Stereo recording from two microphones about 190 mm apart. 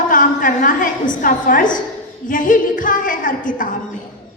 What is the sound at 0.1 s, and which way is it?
A woman's voice, 45° left (ahead or behind).